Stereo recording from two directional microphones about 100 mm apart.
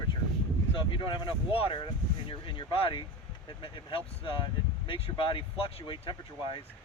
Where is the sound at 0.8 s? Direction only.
55° left (ahead or behind).